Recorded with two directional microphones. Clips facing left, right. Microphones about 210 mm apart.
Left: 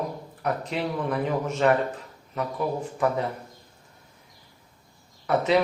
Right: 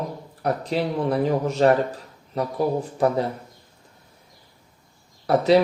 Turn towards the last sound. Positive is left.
turn(degrees=-35)  # may be behind; listen again after turning